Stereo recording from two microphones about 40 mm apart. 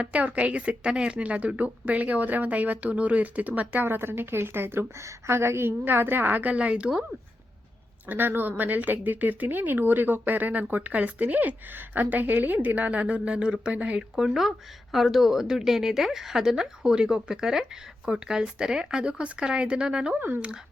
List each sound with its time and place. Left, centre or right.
0.0 s speech: right
3.8 s a woman's voice: right
5.3 s a woman's voice: right
6.6 s a woman's voice: right
8.0 s a woman's voice: right
14.2 s speech: centre
20.1 s a woman's voice: right